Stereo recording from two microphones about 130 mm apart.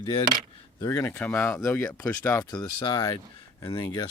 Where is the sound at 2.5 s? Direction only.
30° left (ahead or behind).